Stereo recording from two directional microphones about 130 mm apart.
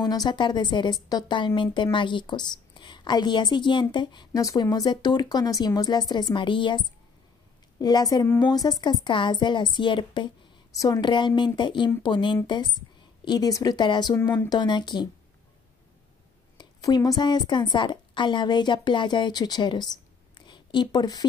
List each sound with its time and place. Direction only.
0.0 s a woman's voice: 30° left (ahead or behind)
14.1 s speech: 15° left (ahead or behind)
14.5 s a woman's voice: 35° left (ahead or behind)
16.5 s a woman's voice: 30° left (ahead or behind)
20.3 s a sound: 35° left (ahead or behind)